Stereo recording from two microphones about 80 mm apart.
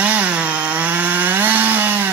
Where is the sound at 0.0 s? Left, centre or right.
Centre.